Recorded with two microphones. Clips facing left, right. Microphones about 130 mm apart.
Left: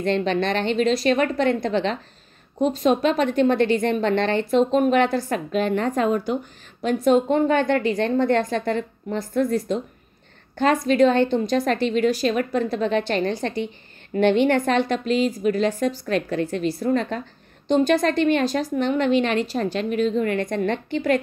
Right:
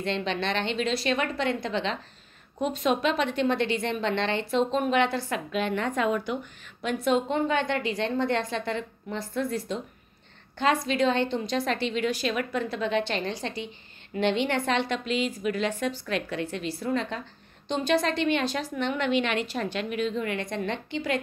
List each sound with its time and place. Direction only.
0.0 s a woman's voice: 45° left (ahead or behind)